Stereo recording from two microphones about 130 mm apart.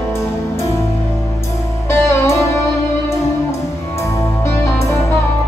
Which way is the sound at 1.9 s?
20° left (ahead or behind).